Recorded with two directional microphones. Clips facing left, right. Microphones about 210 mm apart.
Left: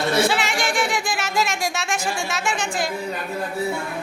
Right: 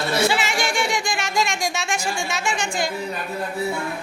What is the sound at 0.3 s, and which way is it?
Music, centre (ahead or behind).